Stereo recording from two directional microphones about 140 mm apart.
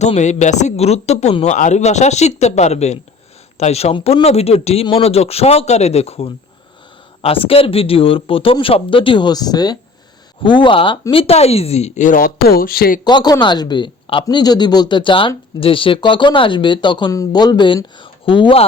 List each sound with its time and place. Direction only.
0.0 s a man's voice: 55° left (ahead or behind); by 13.0 s 90° left
13.1 s speech: 30° left (ahead or behind)